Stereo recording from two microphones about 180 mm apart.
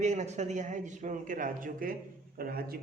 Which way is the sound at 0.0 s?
40° right (ahead or behind).